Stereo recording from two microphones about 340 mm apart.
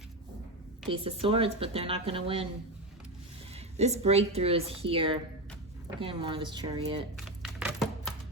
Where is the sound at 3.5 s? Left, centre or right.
Centre.